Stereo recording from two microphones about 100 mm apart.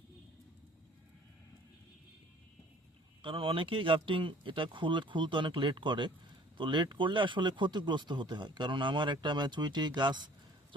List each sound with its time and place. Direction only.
3.2 s speech: 60° right (ahead or behind)